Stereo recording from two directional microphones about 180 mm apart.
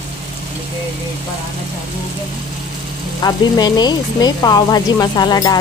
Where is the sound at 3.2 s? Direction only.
25° left (ahead or behind).